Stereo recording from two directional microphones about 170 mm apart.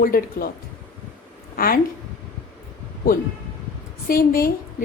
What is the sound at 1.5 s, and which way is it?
Speech, 60° left (ahead or behind).